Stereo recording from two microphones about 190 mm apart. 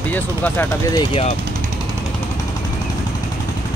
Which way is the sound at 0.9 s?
30° left (ahead or behind).